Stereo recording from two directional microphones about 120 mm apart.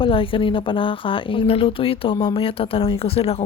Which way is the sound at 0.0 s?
50° left (ahead or behind).